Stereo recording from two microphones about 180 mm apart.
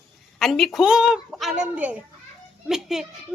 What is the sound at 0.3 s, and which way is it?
A woman's voice, centre (ahead or behind).